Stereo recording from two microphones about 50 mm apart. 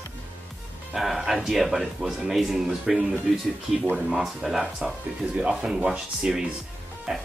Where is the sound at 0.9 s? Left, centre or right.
Centre.